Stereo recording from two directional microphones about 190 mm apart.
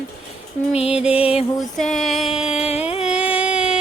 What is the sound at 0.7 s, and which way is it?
Music, 30° left (ahead or behind).